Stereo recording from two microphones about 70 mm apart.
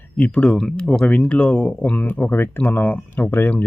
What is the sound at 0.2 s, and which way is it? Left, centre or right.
Speech, centre.